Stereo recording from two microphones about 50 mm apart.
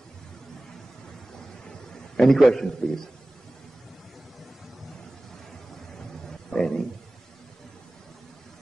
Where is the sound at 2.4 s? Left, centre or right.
Centre.